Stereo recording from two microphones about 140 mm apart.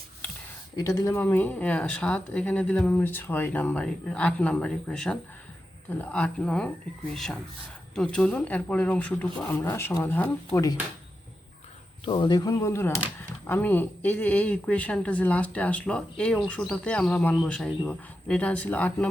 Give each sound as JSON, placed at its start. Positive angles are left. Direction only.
{"t": 0.8, "sound": "speech", "side_deg": 20}
{"t": 12.0, "sound": "speech", "side_deg": 35}